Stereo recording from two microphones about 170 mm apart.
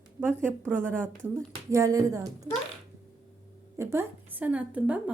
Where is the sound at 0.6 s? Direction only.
10° right (ahead or behind).